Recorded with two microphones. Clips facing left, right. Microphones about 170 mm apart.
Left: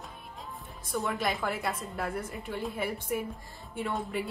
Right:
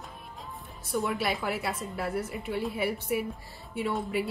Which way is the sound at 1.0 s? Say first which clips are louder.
Even; 5° right (ahead or behind).